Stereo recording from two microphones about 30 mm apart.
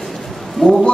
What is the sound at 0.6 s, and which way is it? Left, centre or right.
Speech, left.